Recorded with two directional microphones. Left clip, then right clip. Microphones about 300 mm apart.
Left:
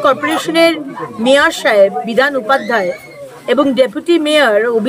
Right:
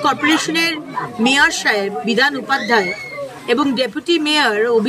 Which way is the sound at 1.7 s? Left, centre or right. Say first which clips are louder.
Left 7 dB; centre.